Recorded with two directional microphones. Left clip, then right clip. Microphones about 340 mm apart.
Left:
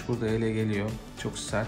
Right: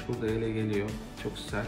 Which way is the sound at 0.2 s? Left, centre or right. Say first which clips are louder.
Left 2 dB; left.